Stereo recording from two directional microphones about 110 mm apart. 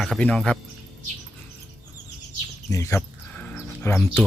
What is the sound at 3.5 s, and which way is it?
Bird, 25° left (ahead or behind).